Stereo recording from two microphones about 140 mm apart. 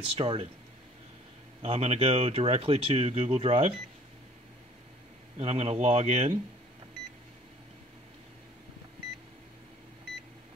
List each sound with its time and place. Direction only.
0.2 s speech: 45° right (ahead or behind)
1.6 s speech: 45° right (ahead or behind)
5.4 s speech: 45° right (ahead or behind)